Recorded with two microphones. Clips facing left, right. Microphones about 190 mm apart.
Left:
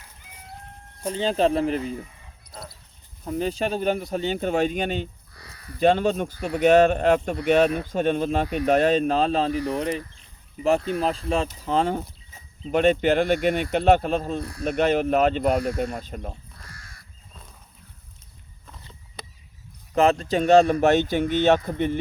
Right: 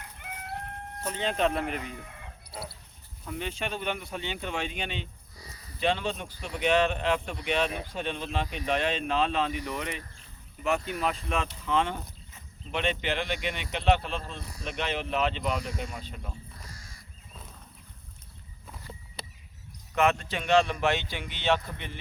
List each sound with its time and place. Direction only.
0.2 s chicken: 65° right (ahead or behind)
1.1 s speech: 35° left (ahead or behind)
2.0 s chicken: 70° right (ahead or behind)
2.5 s chicken: 5° right (ahead or behind)
3.2 s speech: 40° left (ahead or behind)
5.3 s crow: 65° left (ahead or behind)
5.8 s speech: 45° left (ahead or behind)
8.7 s speech: 40° left (ahead or behind)
14.4 s speech: 60° left (ahead or behind)
16.6 s crow: 60° left (ahead or behind)
19.9 s speech: 35° left (ahead or behind)